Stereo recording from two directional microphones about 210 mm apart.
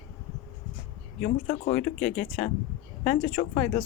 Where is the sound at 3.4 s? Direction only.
35° left (ahead or behind).